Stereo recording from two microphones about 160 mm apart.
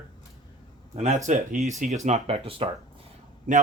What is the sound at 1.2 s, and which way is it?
Speech, 45° right (ahead or behind).